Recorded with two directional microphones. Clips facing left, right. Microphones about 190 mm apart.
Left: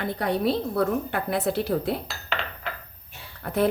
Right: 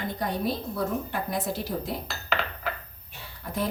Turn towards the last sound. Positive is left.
turn(degrees=60)  # may be behind; listen again after turning